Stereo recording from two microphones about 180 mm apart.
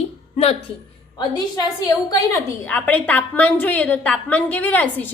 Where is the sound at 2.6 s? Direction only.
10° left (ahead or behind).